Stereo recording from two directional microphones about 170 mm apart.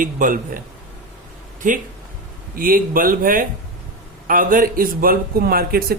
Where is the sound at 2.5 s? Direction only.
55° right (ahead or behind).